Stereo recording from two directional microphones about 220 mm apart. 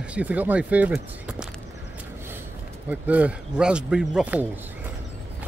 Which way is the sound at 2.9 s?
5° right (ahead or behind).